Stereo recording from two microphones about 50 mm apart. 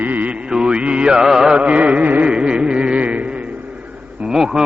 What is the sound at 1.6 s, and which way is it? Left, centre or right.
Music, right.